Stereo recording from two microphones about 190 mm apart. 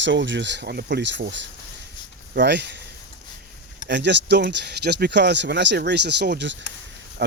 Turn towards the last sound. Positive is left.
turn(degrees=-60)  # may be behind; listen again after turning